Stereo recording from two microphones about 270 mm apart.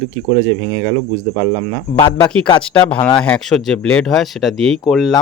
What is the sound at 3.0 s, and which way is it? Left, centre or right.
Speech, centre.